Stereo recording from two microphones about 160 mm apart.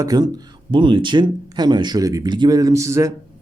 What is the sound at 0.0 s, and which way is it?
Speech, 25° right (ahead or behind).